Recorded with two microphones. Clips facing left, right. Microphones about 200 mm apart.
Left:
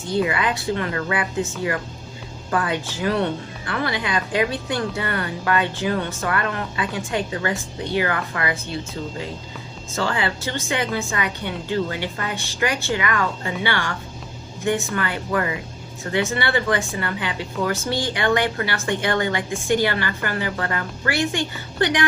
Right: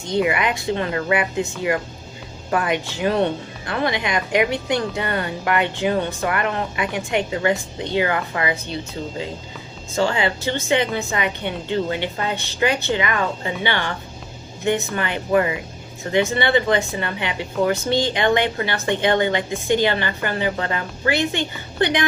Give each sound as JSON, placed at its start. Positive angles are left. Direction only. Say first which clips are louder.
{"t": 0.1, "sound": "a woman's voice", "louder": "right 2 dB", "side_deg": -20}